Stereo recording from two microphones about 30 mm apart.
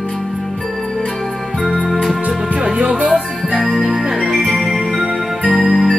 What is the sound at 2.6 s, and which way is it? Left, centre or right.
Music, right.